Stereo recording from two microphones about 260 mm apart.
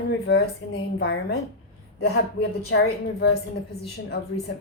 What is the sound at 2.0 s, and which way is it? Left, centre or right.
A woman's voice, left.